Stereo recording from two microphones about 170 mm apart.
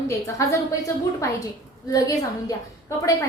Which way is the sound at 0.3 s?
20° left (ahead or behind).